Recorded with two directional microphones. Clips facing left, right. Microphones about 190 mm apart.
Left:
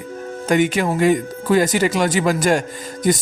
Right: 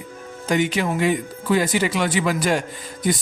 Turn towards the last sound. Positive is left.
turn(degrees=45)  # may be behind; listen again after turning